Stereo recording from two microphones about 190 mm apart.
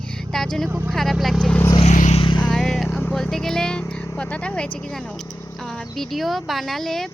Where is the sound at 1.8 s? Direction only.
40° left (ahead or behind).